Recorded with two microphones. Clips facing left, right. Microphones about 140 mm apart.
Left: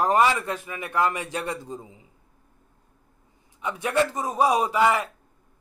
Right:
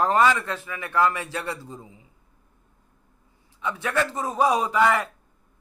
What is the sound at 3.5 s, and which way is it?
Speech, 15° left (ahead or behind).